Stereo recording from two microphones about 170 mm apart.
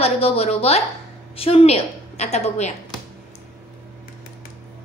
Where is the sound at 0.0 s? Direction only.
35° left (ahead or behind).